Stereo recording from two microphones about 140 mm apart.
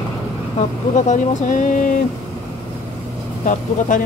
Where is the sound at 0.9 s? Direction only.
65° left (ahead or behind).